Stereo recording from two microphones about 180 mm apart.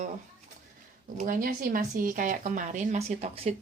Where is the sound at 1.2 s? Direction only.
50° right (ahead or behind); by 3.5 s 35° right (ahead or behind).